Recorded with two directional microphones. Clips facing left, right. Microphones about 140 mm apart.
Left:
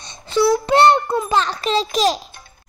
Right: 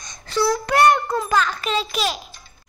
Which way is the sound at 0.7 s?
25° left (ahead or behind).